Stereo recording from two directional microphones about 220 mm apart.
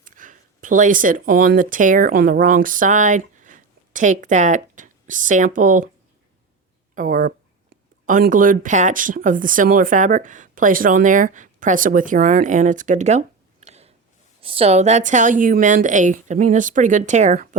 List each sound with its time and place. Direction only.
0.0 s speech: 35° right (ahead or behind)
6.9 s a woman's voice: 35° right (ahead or behind)